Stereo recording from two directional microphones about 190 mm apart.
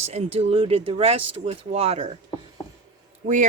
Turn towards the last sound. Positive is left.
turn(degrees=-40)  # may be behind; listen again after turning